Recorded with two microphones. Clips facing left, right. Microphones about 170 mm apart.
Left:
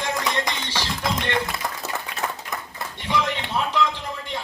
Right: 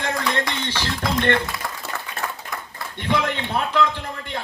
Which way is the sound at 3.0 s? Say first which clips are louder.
Right 2 dB; 55° right (ahead or behind).